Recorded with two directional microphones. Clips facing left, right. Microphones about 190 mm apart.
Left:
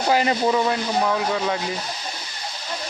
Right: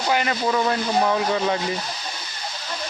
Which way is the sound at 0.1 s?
30° left (ahead or behind).